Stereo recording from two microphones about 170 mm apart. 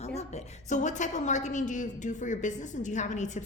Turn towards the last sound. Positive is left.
turn(degrees=45)  # may be behind; listen again after turning